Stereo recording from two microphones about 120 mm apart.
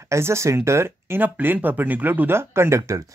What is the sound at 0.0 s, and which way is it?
Speech, 25° right (ahead or behind).